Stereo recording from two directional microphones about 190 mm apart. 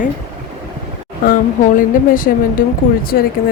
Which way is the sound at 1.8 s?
45° left (ahead or behind).